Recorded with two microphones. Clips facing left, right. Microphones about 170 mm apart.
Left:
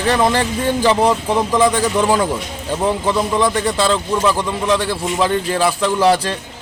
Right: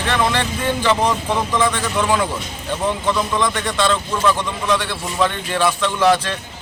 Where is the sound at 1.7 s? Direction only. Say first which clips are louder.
Left 4 dB; 35° left (ahead or behind).